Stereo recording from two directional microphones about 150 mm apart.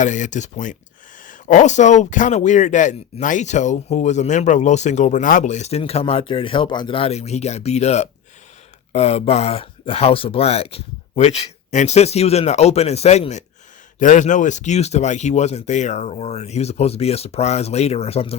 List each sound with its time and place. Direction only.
0.0 s speech: 55° left (ahead or behind)